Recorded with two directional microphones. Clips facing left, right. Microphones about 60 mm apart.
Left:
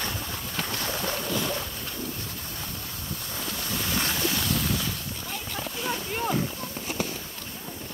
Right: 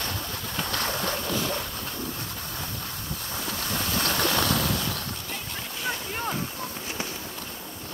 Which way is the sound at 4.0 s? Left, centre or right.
Right.